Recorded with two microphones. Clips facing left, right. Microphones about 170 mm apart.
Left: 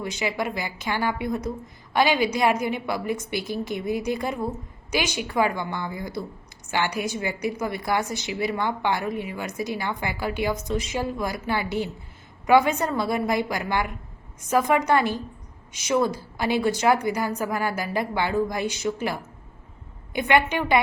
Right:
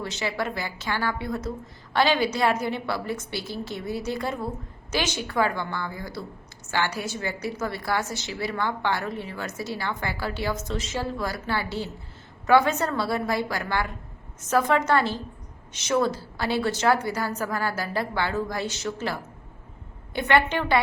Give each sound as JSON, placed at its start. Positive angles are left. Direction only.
{"t": 0.0, "sound": "a woman's voice", "side_deg": 15}